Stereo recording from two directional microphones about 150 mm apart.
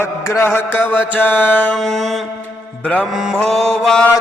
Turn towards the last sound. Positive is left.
turn(degrees=5)  # may be behind; listen again after turning